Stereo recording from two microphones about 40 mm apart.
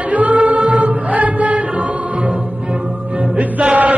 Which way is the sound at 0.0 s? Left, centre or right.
Right.